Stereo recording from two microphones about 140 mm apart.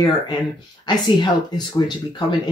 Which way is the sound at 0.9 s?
30° left (ahead or behind).